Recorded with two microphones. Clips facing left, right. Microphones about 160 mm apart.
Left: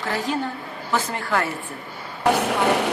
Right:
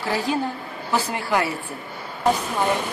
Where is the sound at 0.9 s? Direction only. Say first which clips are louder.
Right 1 dB; 15° right (ahead or behind).